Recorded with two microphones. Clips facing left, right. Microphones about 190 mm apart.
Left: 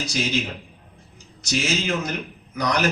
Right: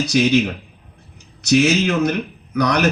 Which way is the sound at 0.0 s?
65° right (ahead or behind).